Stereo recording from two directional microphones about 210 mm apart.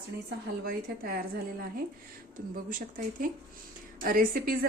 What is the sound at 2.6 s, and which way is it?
A woman's voice, 40° right (ahead or behind).